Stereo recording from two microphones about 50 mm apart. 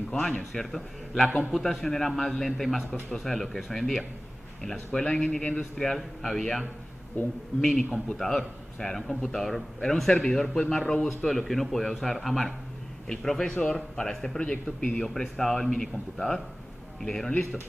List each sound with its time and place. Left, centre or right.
0.4 s speech: centre
5.1 s a man's voice: left
5.6 s speech: centre
7.6 s speech: centre
15.0 s speech: centre